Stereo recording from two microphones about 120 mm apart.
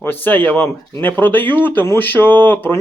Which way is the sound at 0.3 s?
15° left (ahead or behind).